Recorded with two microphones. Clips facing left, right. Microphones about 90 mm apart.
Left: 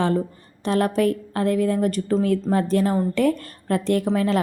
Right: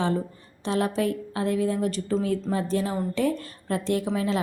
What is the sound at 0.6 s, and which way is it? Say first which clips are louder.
A woman's voice: left 5 dB; 55° left (ahead or behind).